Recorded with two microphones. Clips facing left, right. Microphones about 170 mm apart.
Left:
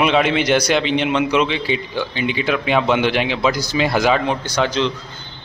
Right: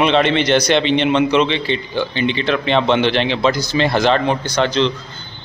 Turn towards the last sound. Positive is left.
turn(degrees=5)  # may be behind; listen again after turning